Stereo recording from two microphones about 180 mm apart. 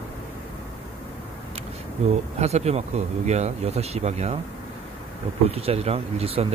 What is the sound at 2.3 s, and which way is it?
Speech, 35° right (ahead or behind).